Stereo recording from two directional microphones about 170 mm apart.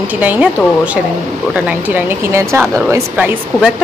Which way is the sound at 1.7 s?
10° right (ahead or behind).